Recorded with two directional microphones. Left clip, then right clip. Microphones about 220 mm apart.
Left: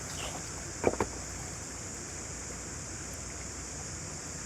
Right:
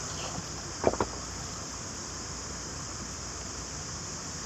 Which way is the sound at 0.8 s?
20° left (ahead or behind).